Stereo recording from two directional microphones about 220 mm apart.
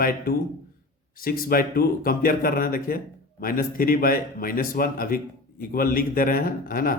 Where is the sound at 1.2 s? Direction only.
40° left (ahead or behind).